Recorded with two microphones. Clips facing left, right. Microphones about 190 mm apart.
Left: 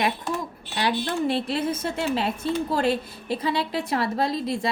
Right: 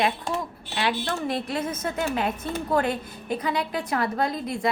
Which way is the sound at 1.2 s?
30° left (ahead or behind).